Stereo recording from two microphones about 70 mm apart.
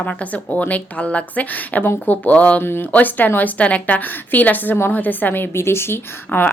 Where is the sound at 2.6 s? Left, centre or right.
Left.